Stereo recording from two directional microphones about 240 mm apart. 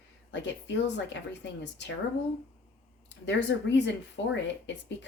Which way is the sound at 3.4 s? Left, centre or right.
Left.